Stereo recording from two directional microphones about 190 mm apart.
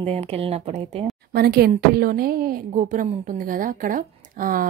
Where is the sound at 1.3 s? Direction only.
55° right (ahead or behind).